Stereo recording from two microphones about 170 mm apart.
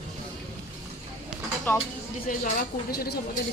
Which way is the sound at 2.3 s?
55° left (ahead or behind).